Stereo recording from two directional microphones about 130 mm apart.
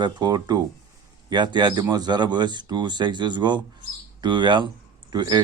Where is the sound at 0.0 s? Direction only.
35° right (ahead or behind).